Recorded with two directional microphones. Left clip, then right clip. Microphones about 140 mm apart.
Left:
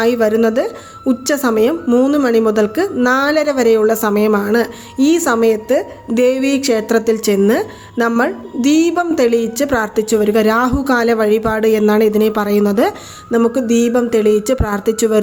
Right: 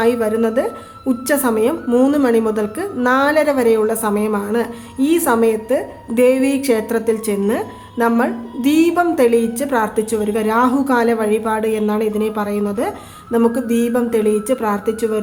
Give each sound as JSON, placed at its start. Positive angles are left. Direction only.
{"t": 0.0, "sound": "a woman's voice", "side_deg": 30}
{"t": 13.3, "sound": "a woman's voice", "side_deg": 25}